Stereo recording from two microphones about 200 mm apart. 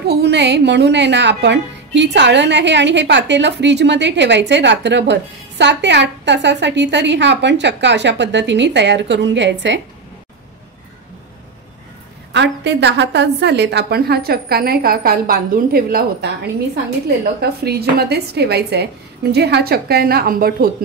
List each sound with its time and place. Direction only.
0.1 s a woman's voice: 55° right (ahead or behind)
12.3 s a woman's voice: 60° right (ahead or behind)
17.4 s a woman's voice: 50° right (ahead or behind)